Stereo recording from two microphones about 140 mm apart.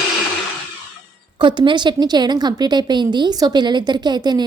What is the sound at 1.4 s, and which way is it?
A woman's voice, 35° right (ahead or behind).